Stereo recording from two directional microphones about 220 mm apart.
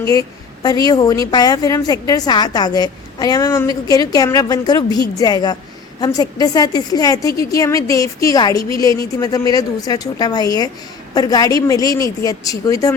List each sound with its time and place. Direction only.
0.0 s a woman's voice: 15° left (ahead or behind)